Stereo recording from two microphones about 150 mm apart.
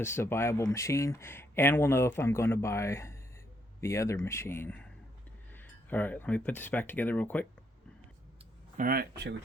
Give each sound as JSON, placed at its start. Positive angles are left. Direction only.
{"t": 0.0, "sound": "speech", "side_deg": 15}
{"t": 8.8, "sound": "speech", "side_deg": -80}